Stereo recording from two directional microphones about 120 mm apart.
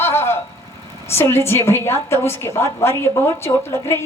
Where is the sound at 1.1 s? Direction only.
20° left (ahead or behind).